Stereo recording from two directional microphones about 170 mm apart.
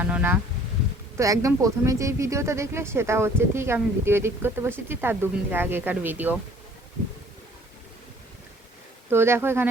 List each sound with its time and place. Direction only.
0.0 s speech: 10° right (ahead or behind)
9.0 s speech: 15° right (ahead or behind)